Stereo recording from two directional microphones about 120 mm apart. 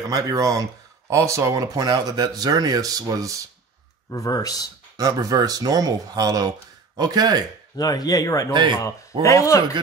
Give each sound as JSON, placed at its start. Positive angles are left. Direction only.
{"t": 0.0, "sound": "speech", "side_deg": -30}
{"t": 4.1, "sound": "speech", "side_deg": 30}
{"t": 4.9, "sound": "speech", "side_deg": -30}
{"t": 7.7, "sound": "a man's voice", "side_deg": 30}